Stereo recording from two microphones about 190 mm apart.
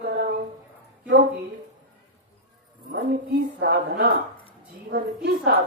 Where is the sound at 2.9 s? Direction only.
60° right (ahead or behind).